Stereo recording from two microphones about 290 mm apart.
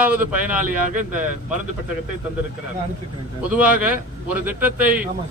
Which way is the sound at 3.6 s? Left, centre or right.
Centre.